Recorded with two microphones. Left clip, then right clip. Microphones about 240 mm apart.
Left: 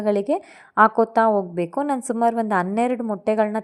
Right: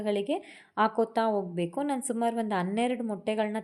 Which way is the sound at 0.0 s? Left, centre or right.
Left.